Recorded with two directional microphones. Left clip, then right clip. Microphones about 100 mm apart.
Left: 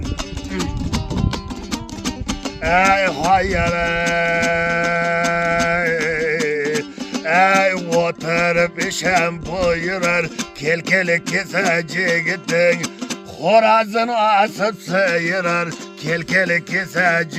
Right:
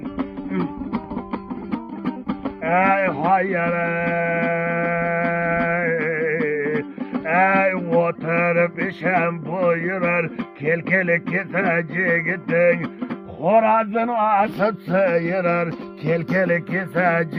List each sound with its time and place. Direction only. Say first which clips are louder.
0.2 s music: right 1 dB; 10° left (ahead or behind)
2.6 s music: left 3 dB; 30° left (ahead or behind)
14.6 s a man's voice: left 1 dB; 15° left (ahead or behind)
14.9 s music: left 2 dB; 40° left (ahead or behind)
16.0 s a man's voice: left 2 dB; 10° left (ahead or behind)
16.9 s music: left 2 dB; 30° left (ahead or behind)